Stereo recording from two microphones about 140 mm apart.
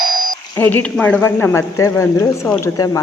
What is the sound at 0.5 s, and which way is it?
A man's voice, 15° left (ahead or behind).